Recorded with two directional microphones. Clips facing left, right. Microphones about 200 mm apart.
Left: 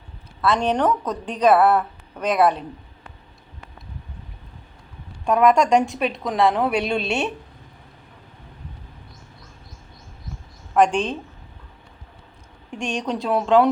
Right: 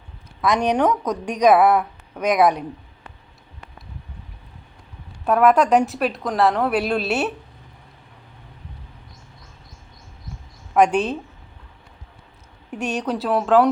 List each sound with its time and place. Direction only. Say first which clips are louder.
0.4 s a woman's voice: right 1 dB; 15° right (ahead or behind)
5.2 s a woman's voice: right 1 dB; 5° right (ahead or behind)
10.8 s a woman's voice: right 1 dB; 10° right (ahead or behind)
12.7 s a woman's voice: right 2 dB; 5° right (ahead or behind)